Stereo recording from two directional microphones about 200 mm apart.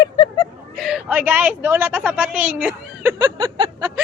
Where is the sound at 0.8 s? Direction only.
Centre (ahead or behind).